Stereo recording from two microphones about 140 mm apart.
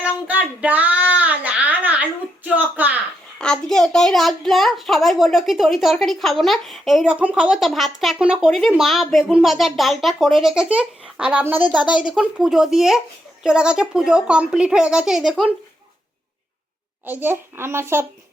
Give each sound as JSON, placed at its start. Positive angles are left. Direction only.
{"t": 0.3, "sound": "child singing", "side_deg": -10}
{"t": 3.3, "sound": "a child's voice", "side_deg": 5}
{"t": 17.1, "sound": "a child's voice", "side_deg": -15}